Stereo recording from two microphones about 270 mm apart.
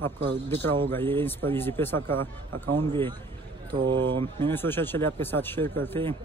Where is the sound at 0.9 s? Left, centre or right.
Centre.